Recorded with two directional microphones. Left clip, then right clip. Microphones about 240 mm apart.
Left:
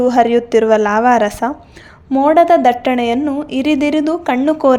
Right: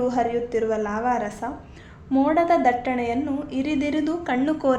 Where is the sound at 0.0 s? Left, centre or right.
Left.